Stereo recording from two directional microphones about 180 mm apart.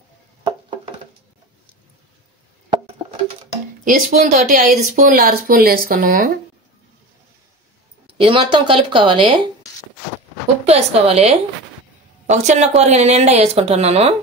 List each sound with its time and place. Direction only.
0.5 s a sound: 30° right (ahead or behind)
3.8 s speech: 45° right (ahead or behind)
8.2 s speech: 30° right (ahead or behind)
10.6 s speech: 35° right (ahead or behind)